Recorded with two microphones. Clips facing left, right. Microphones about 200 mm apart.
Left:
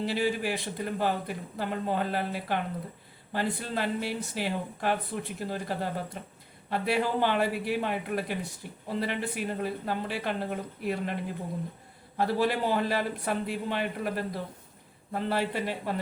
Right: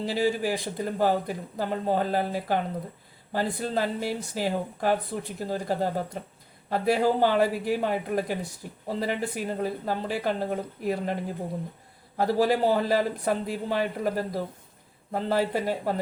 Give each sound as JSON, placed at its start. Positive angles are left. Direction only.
{"t": 0.0, "sound": "speech", "side_deg": -40}